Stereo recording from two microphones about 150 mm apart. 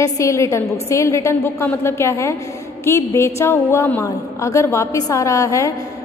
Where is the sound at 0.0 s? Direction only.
20° left (ahead or behind).